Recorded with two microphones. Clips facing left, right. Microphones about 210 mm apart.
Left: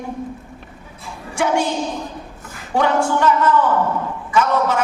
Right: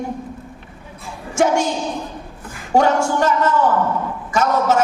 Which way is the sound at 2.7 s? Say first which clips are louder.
Right 2 dB; 45° right (ahead or behind).